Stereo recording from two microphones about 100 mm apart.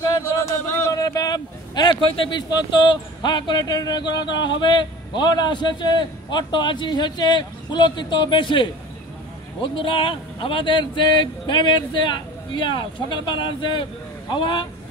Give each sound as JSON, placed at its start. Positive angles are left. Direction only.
{"t": 0.8, "sound": "speech", "side_deg": 35}